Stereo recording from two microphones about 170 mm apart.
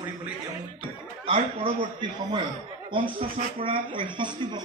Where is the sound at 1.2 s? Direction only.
30° right (ahead or behind).